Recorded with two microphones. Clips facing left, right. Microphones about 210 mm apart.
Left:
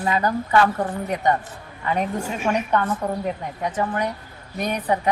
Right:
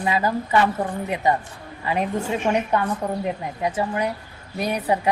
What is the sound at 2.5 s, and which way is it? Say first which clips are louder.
Speech: right 1 dB; 20° right (ahead or behind).